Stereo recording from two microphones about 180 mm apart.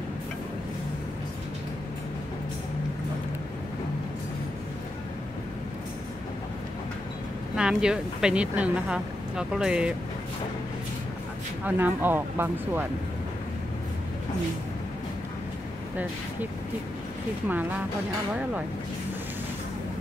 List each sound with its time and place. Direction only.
7.5 s speech: 5° right (ahead or behind)
11.6 s speech: 10° right (ahead or behind)